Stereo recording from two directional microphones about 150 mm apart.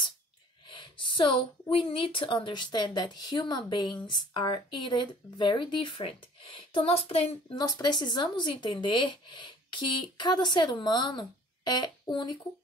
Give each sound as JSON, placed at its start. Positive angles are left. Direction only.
{"t": 0.7, "sound": "a sound", "side_deg": 35}
{"t": 1.7, "sound": "a woman's voice", "side_deg": 35}
{"t": 7.5, "sound": "a woman's voice", "side_deg": 25}